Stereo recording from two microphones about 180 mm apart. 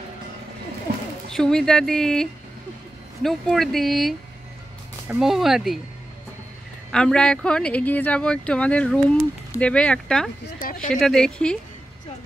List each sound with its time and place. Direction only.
1.3 s speech: 5° left (ahead or behind)
6.9 s speech: 5° left (ahead or behind)
10.4 s speech: 50° left (ahead or behind)
10.9 s speech: 5° left (ahead or behind)